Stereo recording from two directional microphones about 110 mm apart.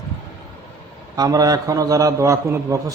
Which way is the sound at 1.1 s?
35° right (ahead or behind).